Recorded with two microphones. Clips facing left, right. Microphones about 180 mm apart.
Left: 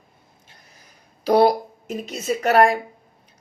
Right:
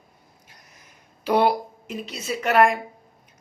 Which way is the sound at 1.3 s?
40° left (ahead or behind).